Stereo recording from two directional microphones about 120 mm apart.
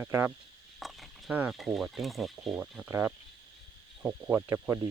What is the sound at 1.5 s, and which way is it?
Speech, centre (ahead or behind).